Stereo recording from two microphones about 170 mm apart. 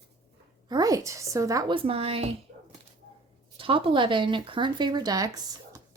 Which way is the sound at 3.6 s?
30° right (ahead or behind).